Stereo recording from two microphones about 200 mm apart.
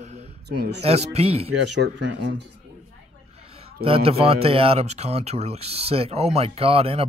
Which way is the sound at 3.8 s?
30° right (ahead or behind).